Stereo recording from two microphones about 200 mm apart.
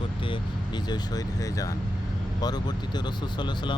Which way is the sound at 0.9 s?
20° left (ahead or behind).